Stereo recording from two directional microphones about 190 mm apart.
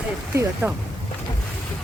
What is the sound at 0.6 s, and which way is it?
Speech, 10° right (ahead or behind).